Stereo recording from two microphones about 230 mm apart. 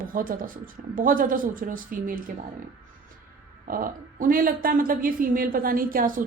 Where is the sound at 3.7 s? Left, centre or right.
Right.